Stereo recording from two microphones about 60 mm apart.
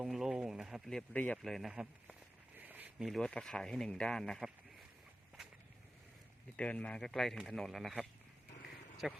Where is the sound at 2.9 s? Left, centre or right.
Centre.